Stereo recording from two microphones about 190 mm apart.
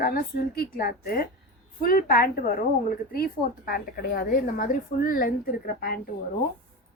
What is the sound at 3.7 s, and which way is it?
A woman's voice, 50° left (ahead or behind).